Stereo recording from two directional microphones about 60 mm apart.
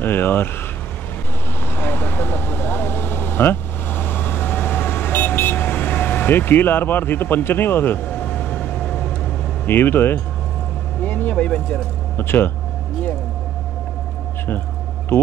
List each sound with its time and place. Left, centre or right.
0.0 s speech: left
1.7 s vehicle: left
8.1 s vehicle: centre
9.7 s speech: left
11.1 s a sound: left
11.3 s speech: centre
12.2 s speech: left